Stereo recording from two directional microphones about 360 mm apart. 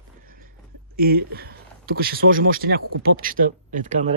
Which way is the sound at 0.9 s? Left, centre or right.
Right.